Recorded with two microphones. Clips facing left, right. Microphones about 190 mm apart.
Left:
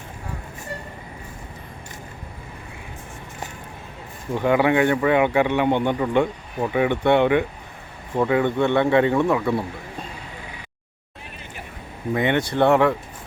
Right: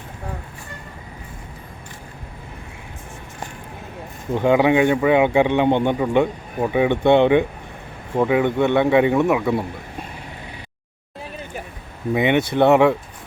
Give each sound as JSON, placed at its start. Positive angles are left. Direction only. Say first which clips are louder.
{"t": 4.4, "sound": "a man's voice", "louder": "right 3 dB", "side_deg": -20}
{"t": 12.1, "sound": "a man's voice", "louder": "right 3 dB", "side_deg": -15}